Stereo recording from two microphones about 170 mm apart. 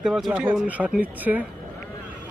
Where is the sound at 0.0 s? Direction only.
Centre (ahead or behind).